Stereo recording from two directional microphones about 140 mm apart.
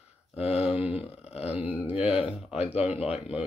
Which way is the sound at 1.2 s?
50° left (ahead or behind).